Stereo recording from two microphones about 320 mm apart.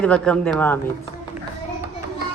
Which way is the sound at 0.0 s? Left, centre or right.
Centre.